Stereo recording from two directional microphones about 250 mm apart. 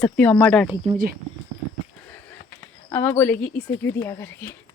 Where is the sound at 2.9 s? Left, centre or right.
Centre.